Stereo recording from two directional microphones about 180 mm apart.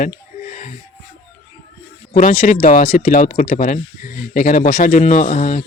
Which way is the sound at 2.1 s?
40° left (ahead or behind).